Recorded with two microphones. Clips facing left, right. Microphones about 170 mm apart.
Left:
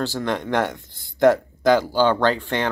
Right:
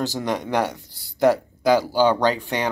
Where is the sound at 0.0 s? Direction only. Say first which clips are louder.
Even; 10° right (ahead or behind).